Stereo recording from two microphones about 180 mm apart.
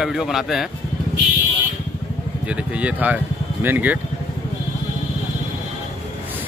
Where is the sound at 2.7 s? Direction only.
10° right (ahead or behind).